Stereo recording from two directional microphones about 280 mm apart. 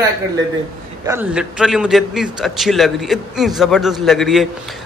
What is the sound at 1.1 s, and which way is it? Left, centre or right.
A man's voice, centre.